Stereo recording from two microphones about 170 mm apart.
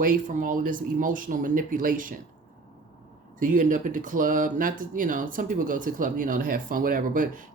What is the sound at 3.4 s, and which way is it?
Speech, 50° right (ahead or behind).